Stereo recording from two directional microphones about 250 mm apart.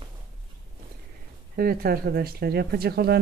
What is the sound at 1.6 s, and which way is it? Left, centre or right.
Speech, right.